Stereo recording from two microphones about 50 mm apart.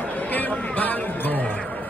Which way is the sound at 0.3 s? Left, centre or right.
Left.